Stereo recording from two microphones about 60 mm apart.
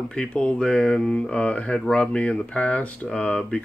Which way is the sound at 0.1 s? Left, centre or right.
Centre.